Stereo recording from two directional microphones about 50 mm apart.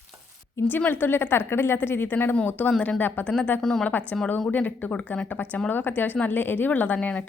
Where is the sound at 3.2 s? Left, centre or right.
Left.